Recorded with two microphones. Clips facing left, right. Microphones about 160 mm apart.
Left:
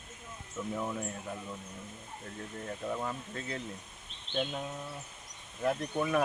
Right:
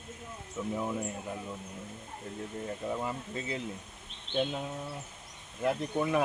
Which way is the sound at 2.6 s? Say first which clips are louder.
Right 1 dB; 10° right (ahead or behind).